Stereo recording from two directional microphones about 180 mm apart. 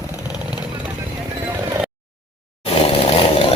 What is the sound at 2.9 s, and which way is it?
Chainsaw, 30° left (ahead or behind).